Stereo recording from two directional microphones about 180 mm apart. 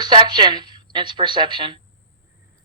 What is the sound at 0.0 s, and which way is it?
A woman's voice, 25° right (ahead or behind).